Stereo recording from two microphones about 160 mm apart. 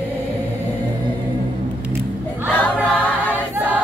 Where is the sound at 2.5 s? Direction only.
10° left (ahead or behind).